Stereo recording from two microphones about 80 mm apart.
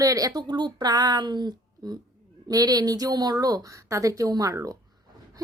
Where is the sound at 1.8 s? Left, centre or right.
Right.